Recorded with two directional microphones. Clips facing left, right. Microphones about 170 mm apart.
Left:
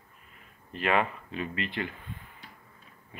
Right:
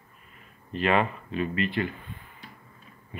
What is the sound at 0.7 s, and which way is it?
Speech, 10° left (ahead or behind).